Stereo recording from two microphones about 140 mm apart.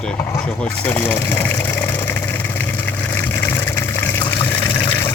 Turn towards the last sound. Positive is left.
turn(degrees=30)  # may be behind; listen again after turning